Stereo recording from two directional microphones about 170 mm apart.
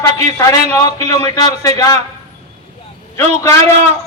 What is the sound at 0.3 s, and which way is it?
A man's voice, 20° left (ahead or behind).